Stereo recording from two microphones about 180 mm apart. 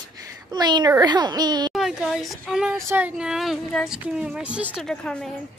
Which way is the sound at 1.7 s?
Centre (ahead or behind).